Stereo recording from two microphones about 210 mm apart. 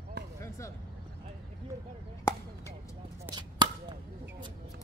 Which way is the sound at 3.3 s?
20° right (ahead or behind).